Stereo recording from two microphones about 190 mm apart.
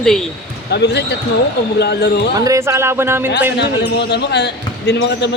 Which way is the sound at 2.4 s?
15° right (ahead or behind).